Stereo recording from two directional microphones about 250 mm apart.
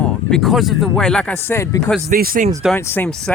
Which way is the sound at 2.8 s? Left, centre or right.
Centre.